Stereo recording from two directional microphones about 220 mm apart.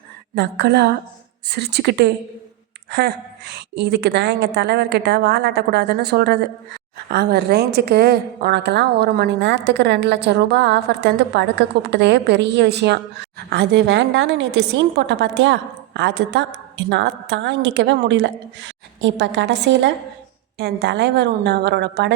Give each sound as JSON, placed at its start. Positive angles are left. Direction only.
{"t": 0.3, "sound": "a woman's voice", "side_deg": -50}
{"t": 3.5, "sound": "a woman's voice", "side_deg": -50}